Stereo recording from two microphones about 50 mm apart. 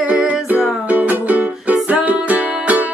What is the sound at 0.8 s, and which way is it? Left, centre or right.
Music, right.